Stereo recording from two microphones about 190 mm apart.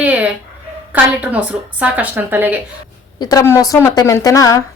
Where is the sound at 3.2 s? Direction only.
20° left (ahead or behind).